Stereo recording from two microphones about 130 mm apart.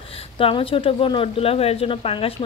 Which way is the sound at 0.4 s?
45° left (ahead or behind).